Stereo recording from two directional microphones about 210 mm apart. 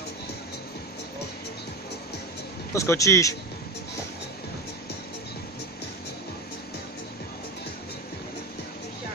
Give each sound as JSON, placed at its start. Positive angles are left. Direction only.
{"t": 2.7, "sound": "a man's voice", "side_deg": 15}